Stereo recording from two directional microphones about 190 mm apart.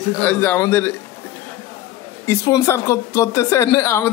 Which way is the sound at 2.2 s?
15° left (ahead or behind).